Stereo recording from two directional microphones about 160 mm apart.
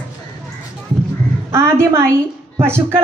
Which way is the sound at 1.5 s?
15° right (ahead or behind).